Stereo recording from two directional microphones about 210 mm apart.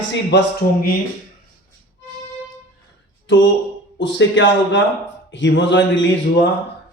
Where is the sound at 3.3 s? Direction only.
60° left (ahead or behind).